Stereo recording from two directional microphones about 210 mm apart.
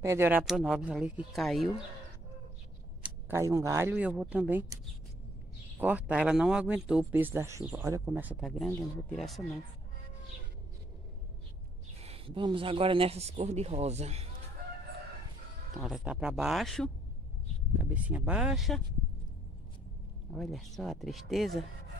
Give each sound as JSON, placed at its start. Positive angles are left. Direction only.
{"t": 0.0, "sound": "speech", "side_deg": -10}
{"t": 3.0, "sound": "speech", "side_deg": -10}
{"t": 5.8, "sound": "speech", "side_deg": -5}
{"t": 12.0, "sound": "speech", "side_deg": -25}
{"t": 15.8, "sound": "speech", "side_deg": 0}
{"t": 20.3, "sound": "speech", "side_deg": 0}